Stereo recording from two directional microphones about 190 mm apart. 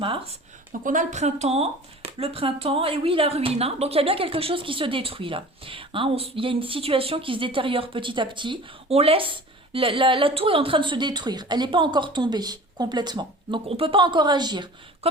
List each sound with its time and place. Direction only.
0.7 s speech: 45° right (ahead or behind); by 14.7 s 20° right (ahead or behind)